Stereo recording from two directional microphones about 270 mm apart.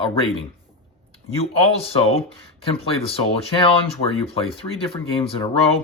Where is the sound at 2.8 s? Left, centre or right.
Left.